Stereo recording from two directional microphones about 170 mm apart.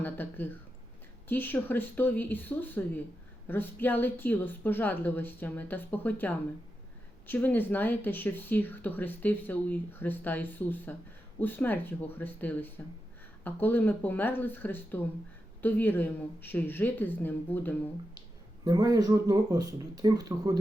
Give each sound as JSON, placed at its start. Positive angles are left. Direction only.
{"t": 0.0, "sound": "speech", "side_deg": 10}
{"t": 18.6, "sound": "speech", "side_deg": -20}